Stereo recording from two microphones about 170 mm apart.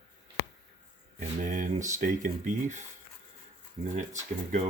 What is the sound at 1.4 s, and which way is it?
Speech, 50° right (ahead or behind).